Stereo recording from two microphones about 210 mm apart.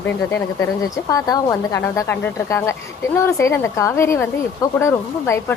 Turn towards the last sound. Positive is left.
turn(degrees=10)  # may be behind; listen again after turning